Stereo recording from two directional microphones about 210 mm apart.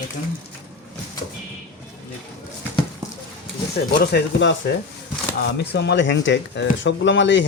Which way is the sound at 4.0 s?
55° left (ahead or behind).